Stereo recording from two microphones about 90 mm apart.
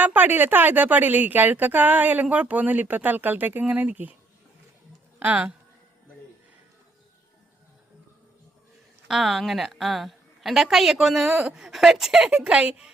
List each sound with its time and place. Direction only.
0.0 s a woman's voice: 20° right (ahead or behind)
5.2 s a woman's voice: 15° right (ahead or behind)
9.0 s a woman's voice: 5° right (ahead or behind)